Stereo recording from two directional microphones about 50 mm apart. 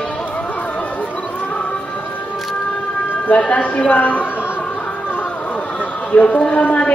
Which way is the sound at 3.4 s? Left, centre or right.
Left.